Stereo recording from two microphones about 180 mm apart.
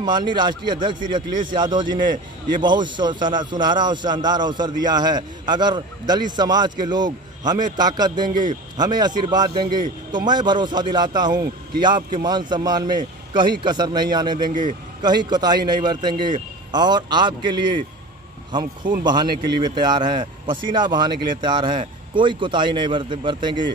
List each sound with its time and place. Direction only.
0.0 s a man's voice: 25° right (ahead or behind)